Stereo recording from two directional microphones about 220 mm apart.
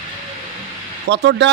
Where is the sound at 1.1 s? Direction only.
55° right (ahead or behind).